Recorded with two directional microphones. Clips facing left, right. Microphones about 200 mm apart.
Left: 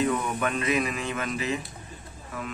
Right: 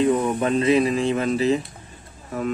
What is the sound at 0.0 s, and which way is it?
Speech, 30° right (ahead or behind).